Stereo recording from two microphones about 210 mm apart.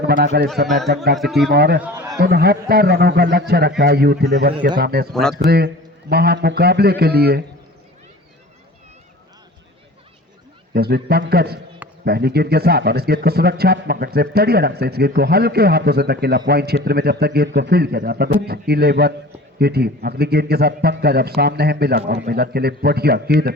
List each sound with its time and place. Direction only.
0.0 s speech: 50° right (ahead or behind)
1.1 s speech: centre (ahead or behind)
1.5 s speech: 50° right (ahead or behind)
1.8 s a sound: 10° right (ahead or behind)
2.1 s speech: 50° right (ahead or behind)
5.1 s speech: centre (ahead or behind)
5.5 s speech: 50° right (ahead or behind)
10.8 s speech: 50° right (ahead or behind)